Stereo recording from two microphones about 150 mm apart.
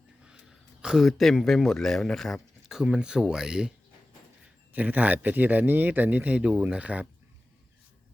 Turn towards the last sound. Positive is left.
turn(degrees=-10)  # may be behind; listen again after turning